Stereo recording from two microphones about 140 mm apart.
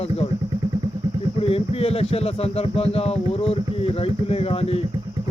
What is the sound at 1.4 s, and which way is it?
Speech, 45° left (ahead or behind).